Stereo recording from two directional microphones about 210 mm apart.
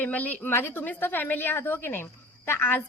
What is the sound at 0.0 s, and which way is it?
A woman's voice, 10° left (ahead or behind).